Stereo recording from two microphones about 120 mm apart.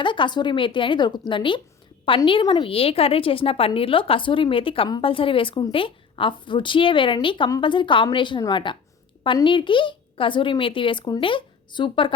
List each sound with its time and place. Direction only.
0.0 s a woman's voice: 40° left (ahead or behind)